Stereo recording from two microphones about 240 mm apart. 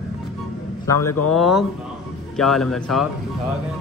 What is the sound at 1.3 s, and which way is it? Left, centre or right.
Speech, centre.